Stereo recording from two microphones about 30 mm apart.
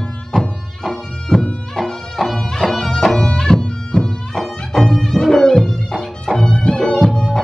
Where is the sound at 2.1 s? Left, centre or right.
Centre.